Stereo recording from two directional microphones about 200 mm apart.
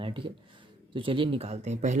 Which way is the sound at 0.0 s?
25° right (ahead or behind).